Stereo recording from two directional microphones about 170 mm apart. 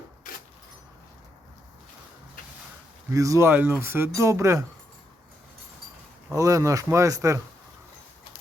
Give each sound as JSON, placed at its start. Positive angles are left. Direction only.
{"t": 3.1, "sound": "speech", "side_deg": -20}
{"t": 6.3, "sound": "speech", "side_deg": -20}